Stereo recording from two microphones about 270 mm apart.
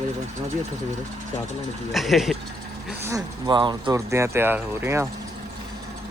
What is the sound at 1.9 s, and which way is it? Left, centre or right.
Speech, centre.